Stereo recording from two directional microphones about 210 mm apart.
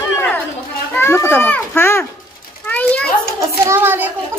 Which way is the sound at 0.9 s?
10° left (ahead or behind).